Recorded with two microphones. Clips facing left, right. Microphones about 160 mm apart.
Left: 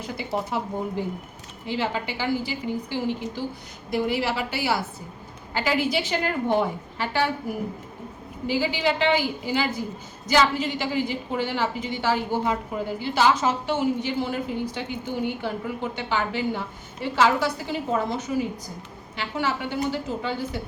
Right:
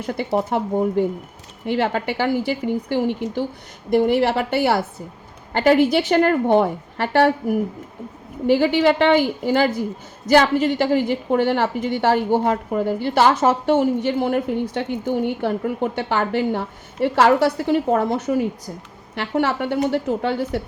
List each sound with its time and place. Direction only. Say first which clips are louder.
0.0 s a woman's voice: right 7 dB; 60° right (ahead or behind)